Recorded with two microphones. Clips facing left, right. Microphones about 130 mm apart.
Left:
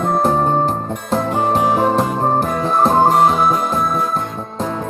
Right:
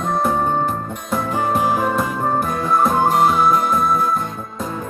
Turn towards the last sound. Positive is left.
turn(degrees=35)  # may be behind; listen again after turning